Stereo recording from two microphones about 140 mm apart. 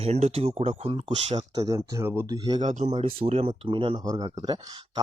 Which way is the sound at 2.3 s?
30° right (ahead or behind).